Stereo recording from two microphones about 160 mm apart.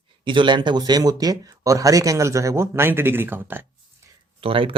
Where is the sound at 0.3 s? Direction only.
30° right (ahead or behind); by 3.7 s 15° right (ahead or behind).